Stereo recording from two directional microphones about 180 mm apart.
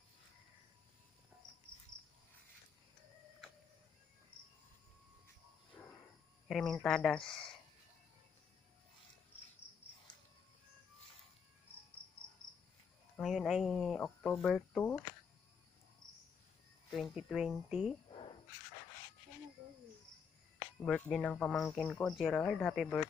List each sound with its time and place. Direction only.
6.5 s speech: centre (ahead or behind)
13.1 s speech: centre (ahead or behind)
16.0 s cricket: 20° right (ahead or behind)
16.9 s speech: centre (ahead or behind)
20.7 s speech: 5° left (ahead or behind)